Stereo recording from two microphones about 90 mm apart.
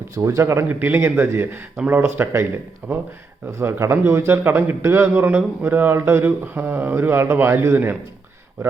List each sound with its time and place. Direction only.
0.1 s speech: 35° right (ahead or behind)
0.7 s speech: 20° right (ahead or behind)